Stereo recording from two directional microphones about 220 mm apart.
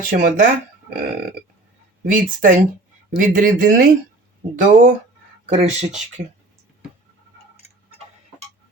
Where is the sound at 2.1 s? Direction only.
35° right (ahead or behind).